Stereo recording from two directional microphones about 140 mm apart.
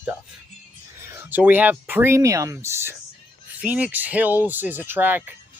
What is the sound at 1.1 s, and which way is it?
Speech, 15° right (ahead or behind).